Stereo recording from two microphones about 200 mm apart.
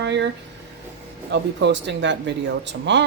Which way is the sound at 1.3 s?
65° right (ahead or behind).